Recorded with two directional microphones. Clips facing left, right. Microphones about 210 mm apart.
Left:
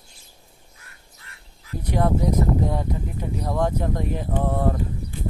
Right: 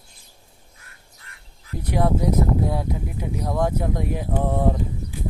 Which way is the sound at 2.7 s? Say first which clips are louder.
Even; 10° right (ahead or behind).